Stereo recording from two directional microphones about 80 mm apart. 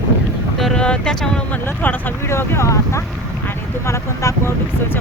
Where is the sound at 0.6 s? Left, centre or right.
Centre.